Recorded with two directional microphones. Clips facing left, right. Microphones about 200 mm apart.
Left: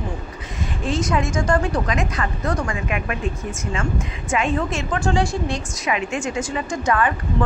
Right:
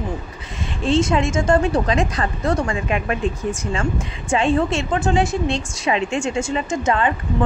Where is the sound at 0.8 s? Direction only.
25° right (ahead or behind).